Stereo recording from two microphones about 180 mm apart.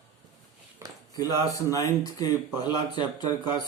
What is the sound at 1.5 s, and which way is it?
Speech, 15° left (ahead or behind).